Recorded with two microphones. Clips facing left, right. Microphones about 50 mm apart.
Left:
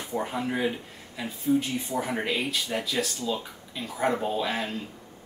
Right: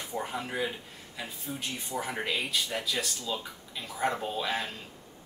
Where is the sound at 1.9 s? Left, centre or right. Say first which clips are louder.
Left 2 dB; centre.